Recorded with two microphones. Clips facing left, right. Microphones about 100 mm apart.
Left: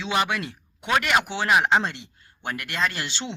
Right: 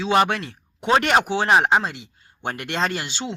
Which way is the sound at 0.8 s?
35° right (ahead or behind).